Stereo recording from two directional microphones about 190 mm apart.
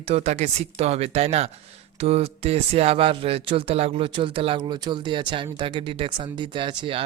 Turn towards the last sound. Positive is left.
turn(degrees=-25)  # may be behind; listen again after turning